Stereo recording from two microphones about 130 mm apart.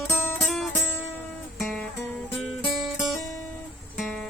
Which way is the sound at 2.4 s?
5° right (ahead or behind).